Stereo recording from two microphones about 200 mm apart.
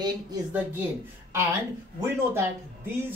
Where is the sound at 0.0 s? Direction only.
15° right (ahead or behind).